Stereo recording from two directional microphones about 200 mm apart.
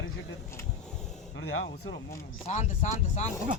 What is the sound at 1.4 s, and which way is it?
Speech, 60° left (ahead or behind).